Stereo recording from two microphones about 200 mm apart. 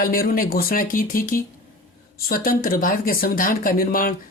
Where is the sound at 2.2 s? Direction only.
45° left (ahead or behind).